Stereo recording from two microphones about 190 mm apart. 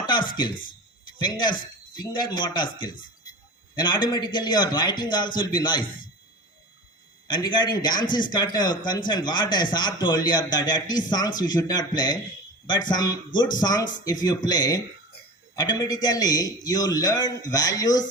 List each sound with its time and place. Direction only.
0.1 s a man's voice: 25° left (ahead or behind)
7.3 s a man's voice: 25° left (ahead or behind)